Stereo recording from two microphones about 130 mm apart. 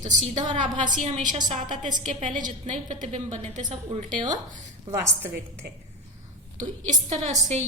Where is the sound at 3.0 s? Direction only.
60° right (ahead or behind).